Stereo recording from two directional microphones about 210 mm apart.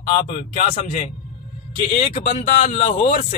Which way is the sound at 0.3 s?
40° left (ahead or behind).